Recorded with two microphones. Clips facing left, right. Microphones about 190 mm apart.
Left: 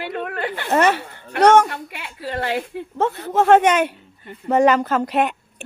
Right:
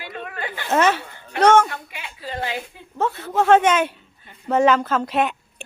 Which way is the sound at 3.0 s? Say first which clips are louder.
Left 2 dB; 25° left (ahead or behind).